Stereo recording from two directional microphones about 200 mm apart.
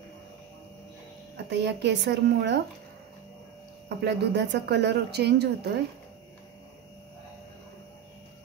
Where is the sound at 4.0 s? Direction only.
60° right (ahead or behind).